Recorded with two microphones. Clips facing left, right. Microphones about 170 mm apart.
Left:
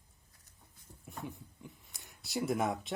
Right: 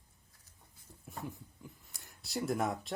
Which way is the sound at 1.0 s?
Centre (ahead or behind).